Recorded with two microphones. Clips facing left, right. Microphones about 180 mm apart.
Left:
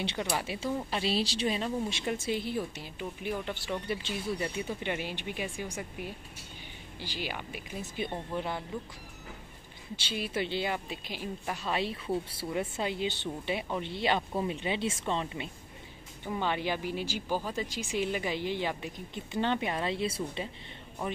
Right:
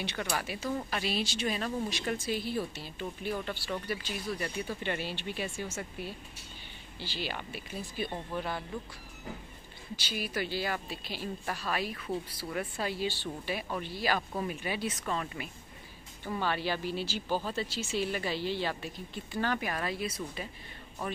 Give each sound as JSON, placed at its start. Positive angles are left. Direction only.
{"t": 0.0, "sound": "a woman's voice", "side_deg": 25}
{"t": 9.9, "sound": "a woman's voice", "side_deg": 25}